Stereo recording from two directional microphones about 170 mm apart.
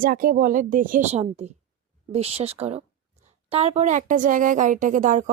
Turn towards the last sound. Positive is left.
turn(degrees=-45)  # may be behind; listen again after turning